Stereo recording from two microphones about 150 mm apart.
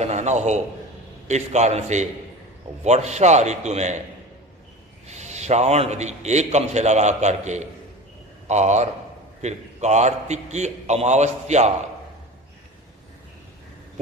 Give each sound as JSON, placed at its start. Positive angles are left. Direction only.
{"t": 0.0, "sound": "a man's voice", "side_deg": -50}
{"t": 5.0, "sound": "a man's voice", "side_deg": -50}